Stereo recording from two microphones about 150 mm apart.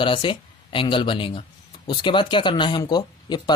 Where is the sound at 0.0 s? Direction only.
35° left (ahead or behind).